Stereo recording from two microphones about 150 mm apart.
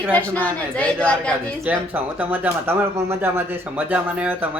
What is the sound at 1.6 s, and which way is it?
Speech, 10° right (ahead or behind).